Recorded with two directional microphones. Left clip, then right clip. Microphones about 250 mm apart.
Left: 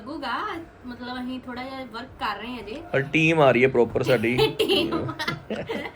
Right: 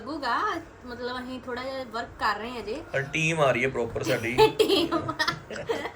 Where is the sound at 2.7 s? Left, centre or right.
Centre.